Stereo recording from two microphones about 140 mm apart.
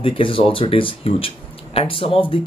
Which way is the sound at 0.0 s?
40° left (ahead or behind).